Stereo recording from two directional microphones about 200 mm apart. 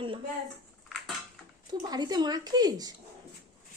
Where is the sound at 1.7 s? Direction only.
20° right (ahead or behind).